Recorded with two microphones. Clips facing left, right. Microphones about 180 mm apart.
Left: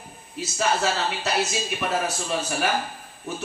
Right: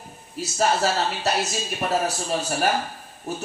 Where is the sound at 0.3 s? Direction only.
40° right (ahead or behind).